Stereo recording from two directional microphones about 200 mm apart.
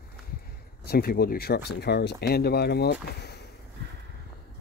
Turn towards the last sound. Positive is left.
turn(degrees=55)  # may be behind; listen again after turning